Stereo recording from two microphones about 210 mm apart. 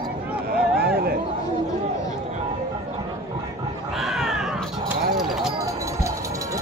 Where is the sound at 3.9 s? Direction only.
Centre (ahead or behind).